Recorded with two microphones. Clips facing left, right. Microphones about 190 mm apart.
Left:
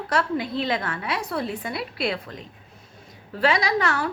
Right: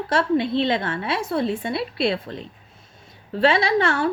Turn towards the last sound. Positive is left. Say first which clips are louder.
# right 4 dB
turn(degrees=-30)  # may be behind; listen again after turning